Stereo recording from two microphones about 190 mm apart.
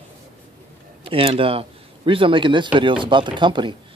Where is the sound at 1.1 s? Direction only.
30° right (ahead or behind).